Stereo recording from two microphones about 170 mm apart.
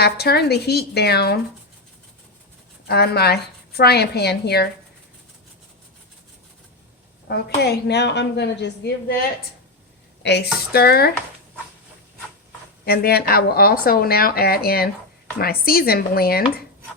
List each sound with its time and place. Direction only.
0.0 s a woman's voice: 70° left (ahead or behind)
2.8 s a woman's voice: 70° left (ahead or behind)
7.3 s a woman's voice: 75° left (ahead or behind)
10.2 s a woman's voice: 75° left (ahead or behind)
12.8 s speech: 65° left (ahead or behind)